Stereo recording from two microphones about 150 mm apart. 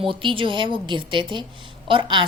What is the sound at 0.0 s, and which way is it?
A woman's voice, 35° right (ahead or behind).